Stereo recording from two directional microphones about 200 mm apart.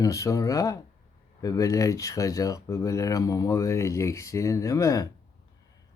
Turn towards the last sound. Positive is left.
turn(degrees=15)  # may be behind; listen again after turning